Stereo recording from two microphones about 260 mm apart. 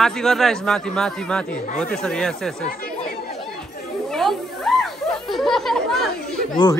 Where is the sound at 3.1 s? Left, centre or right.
Left.